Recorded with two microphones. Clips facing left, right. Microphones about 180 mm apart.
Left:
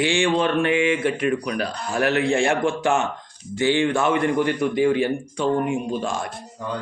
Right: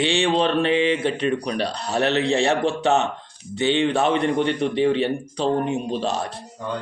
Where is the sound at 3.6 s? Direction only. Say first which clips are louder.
Even; 20° right (ahead or behind).